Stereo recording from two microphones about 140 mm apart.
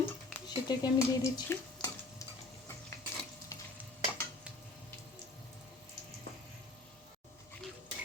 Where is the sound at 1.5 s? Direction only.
25° left (ahead or behind).